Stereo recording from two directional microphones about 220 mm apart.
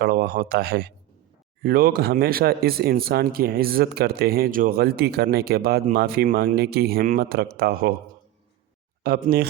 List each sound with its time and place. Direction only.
0.0 s a man's voice: 45° right (ahead or behind)
9.0 s speech: 45° right (ahead or behind)